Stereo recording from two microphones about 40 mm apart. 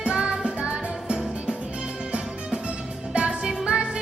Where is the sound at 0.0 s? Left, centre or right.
Right.